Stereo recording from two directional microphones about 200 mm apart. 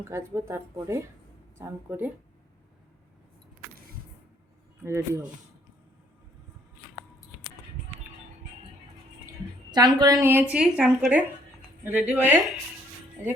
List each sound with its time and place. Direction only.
0.0 s speech: 15° right (ahead or behind)
4.8 s speech: 15° right (ahead or behind)
9.7 s a woman's voice: 20° right (ahead or behind)